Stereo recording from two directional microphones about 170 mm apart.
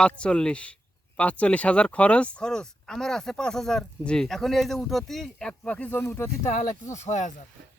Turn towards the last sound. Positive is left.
turn(degrees=45)  # may be behind; listen again after turning